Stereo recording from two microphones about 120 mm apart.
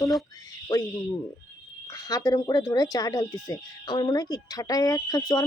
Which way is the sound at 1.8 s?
30° left (ahead or behind).